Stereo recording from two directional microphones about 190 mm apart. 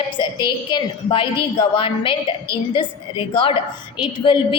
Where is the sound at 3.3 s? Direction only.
25° left (ahead or behind).